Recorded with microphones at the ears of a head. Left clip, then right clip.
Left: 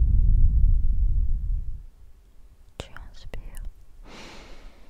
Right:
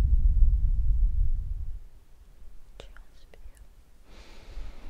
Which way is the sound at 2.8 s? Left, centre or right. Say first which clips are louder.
Left 9 dB; left.